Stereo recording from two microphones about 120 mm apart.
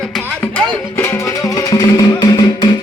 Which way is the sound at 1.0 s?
20° left (ahead or behind).